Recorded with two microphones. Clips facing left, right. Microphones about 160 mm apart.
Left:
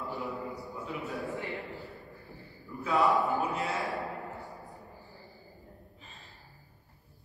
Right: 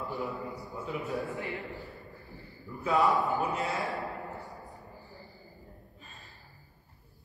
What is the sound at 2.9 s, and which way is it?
A man's voice, centre (ahead or behind).